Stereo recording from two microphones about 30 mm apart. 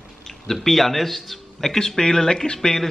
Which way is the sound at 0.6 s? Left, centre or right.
Centre.